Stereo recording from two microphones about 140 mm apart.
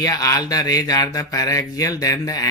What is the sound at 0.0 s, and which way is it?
Speech, 25° left (ahead or behind).